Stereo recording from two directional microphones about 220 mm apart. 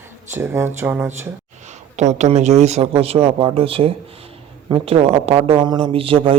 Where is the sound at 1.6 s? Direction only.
30° right (ahead or behind).